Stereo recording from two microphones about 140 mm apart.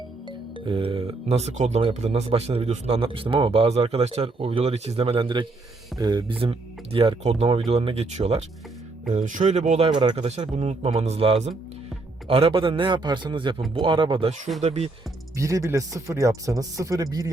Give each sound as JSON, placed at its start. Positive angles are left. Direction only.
{"t": 0.3, "sound": "speech", "side_deg": -40}
{"t": 9.0, "sound": "speech", "side_deg": -65}
{"t": 14.6, "sound": "speech", "side_deg": -55}
{"t": 15.4, "sound": "speech", "side_deg": -20}